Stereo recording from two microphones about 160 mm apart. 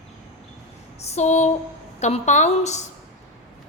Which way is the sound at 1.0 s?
45° left (ahead or behind).